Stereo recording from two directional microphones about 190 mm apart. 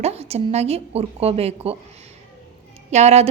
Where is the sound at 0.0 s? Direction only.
35° right (ahead or behind).